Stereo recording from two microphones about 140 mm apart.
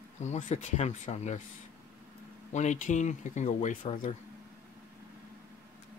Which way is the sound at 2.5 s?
60° left (ahead or behind).